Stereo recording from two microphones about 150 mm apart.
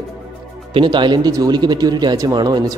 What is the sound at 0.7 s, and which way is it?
Speech, 30° right (ahead or behind).